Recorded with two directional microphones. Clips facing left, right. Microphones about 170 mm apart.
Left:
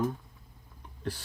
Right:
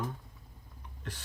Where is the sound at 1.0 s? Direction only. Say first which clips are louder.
Left 9 dB; 35° left (ahead or behind).